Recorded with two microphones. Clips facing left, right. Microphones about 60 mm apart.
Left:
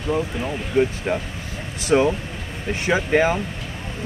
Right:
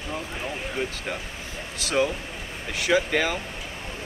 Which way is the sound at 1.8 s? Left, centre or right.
Left.